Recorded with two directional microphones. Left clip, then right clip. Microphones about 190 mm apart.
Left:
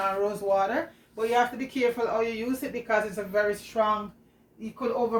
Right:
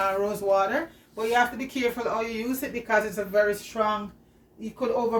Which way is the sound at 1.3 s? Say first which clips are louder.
Right 2 dB; 60° right (ahead or behind).